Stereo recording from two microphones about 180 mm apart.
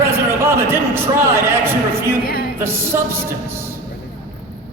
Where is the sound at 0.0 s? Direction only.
15° right (ahead or behind).